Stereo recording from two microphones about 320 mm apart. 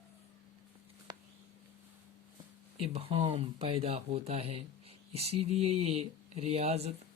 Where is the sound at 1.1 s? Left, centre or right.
Centre.